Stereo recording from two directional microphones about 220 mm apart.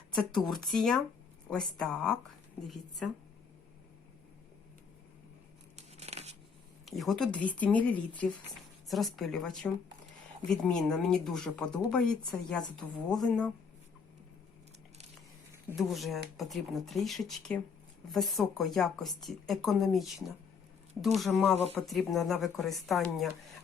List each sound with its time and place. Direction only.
0.3 s a woman's voice: centre (ahead or behind)
5.7 s tearing: 30° right (ahead or behind)
6.8 s a woman's voice: centre (ahead or behind)
15.8 s a woman's voice: centre (ahead or behind)